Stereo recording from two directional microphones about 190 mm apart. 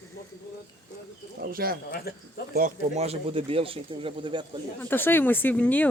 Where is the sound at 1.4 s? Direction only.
50° right (ahead or behind).